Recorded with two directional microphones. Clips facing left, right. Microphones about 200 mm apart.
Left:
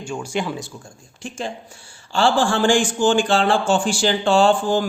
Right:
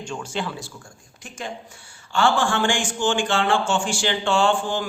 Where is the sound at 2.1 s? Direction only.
30° left (ahead or behind).